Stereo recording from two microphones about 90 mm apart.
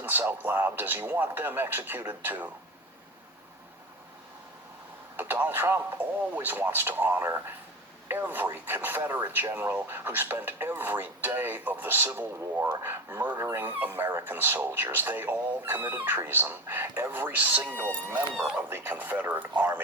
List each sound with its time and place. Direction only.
0.0 s speech: 25° right (ahead or behind)
5.1 s speech: 20° right (ahead or behind)
13.1 s speech: 50° right (ahead or behind)
13.4 s speech: 30° right (ahead or behind)